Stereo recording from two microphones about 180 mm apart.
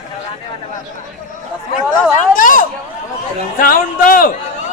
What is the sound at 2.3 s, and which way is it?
A man's voice, 50° left (ahead or behind).